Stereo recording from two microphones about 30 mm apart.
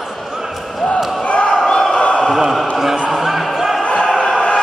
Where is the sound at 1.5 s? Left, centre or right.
Centre.